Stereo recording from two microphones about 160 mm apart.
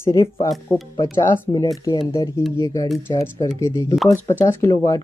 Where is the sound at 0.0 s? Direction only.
20° left (ahead or behind).